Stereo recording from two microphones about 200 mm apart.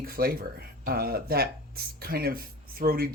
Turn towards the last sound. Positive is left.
turn(degrees=-50)  # may be behind; listen again after turning